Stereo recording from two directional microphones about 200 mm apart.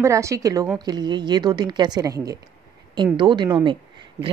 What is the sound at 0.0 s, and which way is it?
A woman's voice, 15° right (ahead or behind).